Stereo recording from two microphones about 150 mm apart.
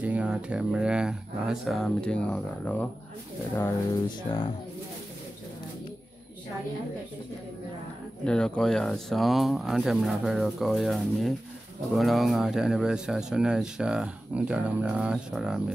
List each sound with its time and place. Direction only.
0.0 s speech: 10° right (ahead or behind); by 4.0 s 15° left (ahead or behind)
8.3 s speech: 5° left (ahead or behind)